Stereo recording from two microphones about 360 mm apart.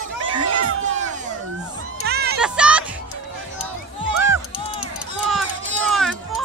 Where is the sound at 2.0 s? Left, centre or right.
Right.